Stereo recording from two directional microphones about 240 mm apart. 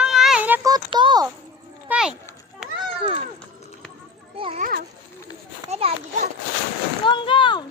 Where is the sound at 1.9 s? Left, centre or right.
Centre.